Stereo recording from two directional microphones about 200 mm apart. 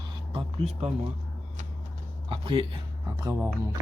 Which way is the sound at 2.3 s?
25° right (ahead or behind).